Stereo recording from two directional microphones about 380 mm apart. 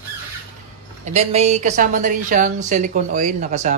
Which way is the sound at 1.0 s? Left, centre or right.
Centre.